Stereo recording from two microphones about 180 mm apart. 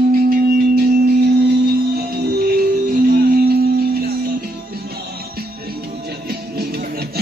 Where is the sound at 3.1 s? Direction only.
60° right (ahead or behind).